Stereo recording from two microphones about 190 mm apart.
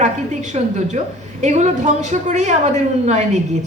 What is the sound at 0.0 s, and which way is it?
A woman's voice, 35° right (ahead or behind).